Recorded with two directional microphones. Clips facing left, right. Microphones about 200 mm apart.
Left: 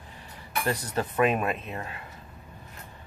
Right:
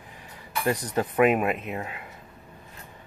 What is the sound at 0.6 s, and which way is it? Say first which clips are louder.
Speech: right 4 dB; 15° right (ahead or behind).